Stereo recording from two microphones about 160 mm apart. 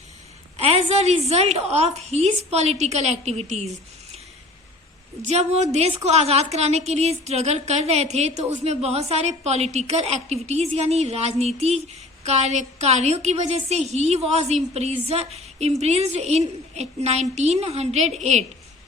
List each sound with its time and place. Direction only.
0.5 s a woman's voice: 40° right (ahead or behind)
5.2 s a woman's voice: 45° right (ahead or behind)